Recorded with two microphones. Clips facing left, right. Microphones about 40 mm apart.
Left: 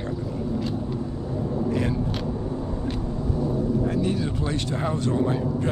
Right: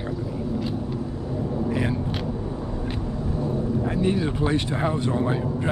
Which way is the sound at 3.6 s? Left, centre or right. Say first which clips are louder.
Right 1 dB; right.